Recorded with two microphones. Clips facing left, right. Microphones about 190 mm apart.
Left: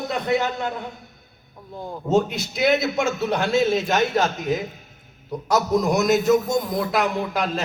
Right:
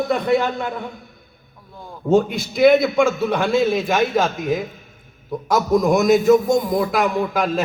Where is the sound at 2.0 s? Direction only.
55° right (ahead or behind).